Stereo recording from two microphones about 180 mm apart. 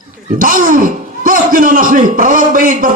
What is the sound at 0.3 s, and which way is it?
A man's voice, 50° right (ahead or behind).